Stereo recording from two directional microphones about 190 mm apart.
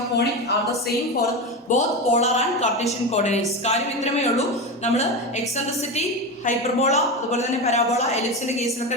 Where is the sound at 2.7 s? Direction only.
Centre (ahead or behind).